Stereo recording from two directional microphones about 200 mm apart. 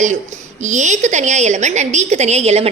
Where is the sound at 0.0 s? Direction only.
35° right (ahead or behind).